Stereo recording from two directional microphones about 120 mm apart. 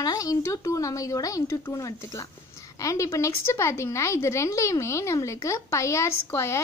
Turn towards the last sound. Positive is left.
turn(degrees=25)  # may be behind; listen again after turning